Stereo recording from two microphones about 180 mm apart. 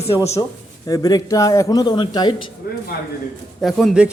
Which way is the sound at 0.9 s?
20° left (ahead or behind).